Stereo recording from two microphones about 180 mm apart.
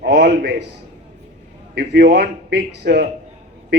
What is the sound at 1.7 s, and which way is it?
A man's voice, 65° right (ahead or behind).